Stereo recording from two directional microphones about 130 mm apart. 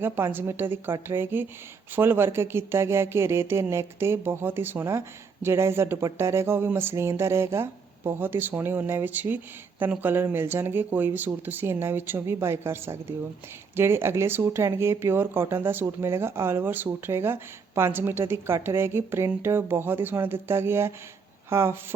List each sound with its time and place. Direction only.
0.0 s speech: 15° right (ahead or behind)